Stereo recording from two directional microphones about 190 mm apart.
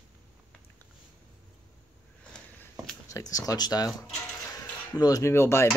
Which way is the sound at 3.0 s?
20° left (ahead or behind).